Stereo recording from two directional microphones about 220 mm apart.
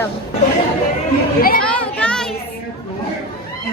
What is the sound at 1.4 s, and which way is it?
Speech, 40° left (ahead or behind).